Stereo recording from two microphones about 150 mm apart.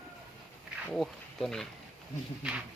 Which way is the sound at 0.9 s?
Centre (ahead or behind).